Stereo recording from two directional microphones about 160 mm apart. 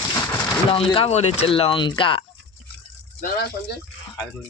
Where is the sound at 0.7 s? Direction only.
35° left (ahead or behind).